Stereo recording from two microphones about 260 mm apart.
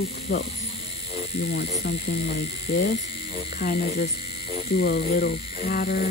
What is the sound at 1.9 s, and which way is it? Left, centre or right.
Speech, left.